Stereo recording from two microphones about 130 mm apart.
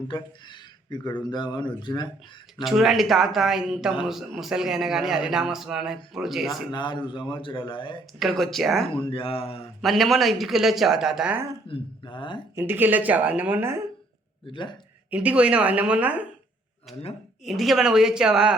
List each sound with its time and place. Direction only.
0.1 s speech: 35° left (ahead or behind)
2.6 s a man's voice: centre (ahead or behind)
6.7 s speech: 35° left (ahead or behind)
8.2 s a man's voice: centre (ahead or behind)
8.9 s speech: 45° left (ahead or behind)
9.8 s a man's voice: centre (ahead or behind)
11.7 s speech: 40° left (ahead or behind)
12.5 s speech: 15° right (ahead or behind)
14.4 s speech: 40° left (ahead or behind)
15.1 s a man's voice: 10° right (ahead or behind)